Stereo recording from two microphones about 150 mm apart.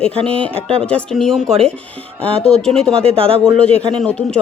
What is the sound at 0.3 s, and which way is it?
Speech, 5° left (ahead or behind).